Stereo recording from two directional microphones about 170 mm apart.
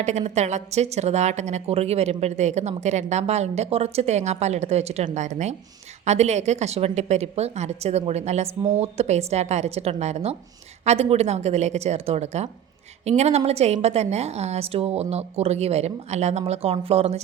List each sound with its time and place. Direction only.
0.0 s a woman's voice: 40° right (ahead or behind)